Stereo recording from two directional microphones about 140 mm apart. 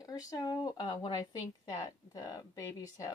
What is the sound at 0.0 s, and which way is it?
Speech, 25° left (ahead or behind).